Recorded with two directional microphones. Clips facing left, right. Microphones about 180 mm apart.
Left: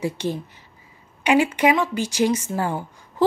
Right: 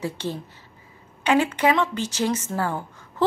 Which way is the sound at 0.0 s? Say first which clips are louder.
Left 4 dB; 15° left (ahead or behind).